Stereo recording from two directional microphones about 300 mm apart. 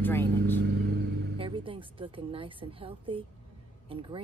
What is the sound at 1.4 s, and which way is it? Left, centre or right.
A woman's voice, centre.